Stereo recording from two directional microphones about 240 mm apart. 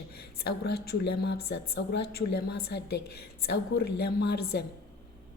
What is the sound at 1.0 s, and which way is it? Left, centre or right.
Speech, left.